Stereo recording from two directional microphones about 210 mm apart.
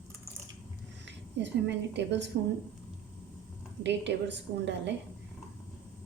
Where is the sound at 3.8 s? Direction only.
55° right (ahead or behind).